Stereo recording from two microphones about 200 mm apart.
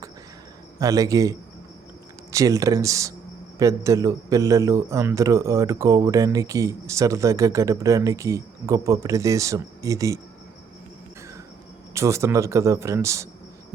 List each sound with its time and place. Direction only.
0.8 s a man's voice: 15° right (ahead or behind)
11.9 s a man's voice: 15° right (ahead or behind)